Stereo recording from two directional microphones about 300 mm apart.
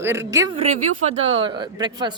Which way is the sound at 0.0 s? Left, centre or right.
Centre.